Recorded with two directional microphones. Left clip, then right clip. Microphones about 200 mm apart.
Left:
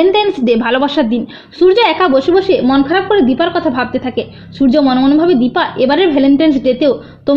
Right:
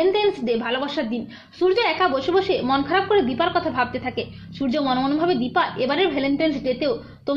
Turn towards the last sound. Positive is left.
turn(degrees=45)  # may be behind; listen again after turning